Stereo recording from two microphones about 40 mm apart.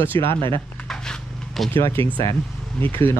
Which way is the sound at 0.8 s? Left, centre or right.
Centre.